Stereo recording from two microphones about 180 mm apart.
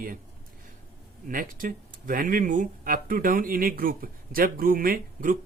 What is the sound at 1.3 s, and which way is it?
Speech, 50° right (ahead or behind).